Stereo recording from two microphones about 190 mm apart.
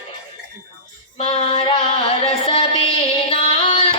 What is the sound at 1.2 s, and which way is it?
Music, 30° left (ahead or behind).